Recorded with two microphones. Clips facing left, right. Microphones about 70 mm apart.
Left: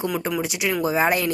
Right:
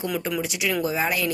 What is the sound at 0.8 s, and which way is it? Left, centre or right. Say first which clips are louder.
Speech: left 7 dB; left.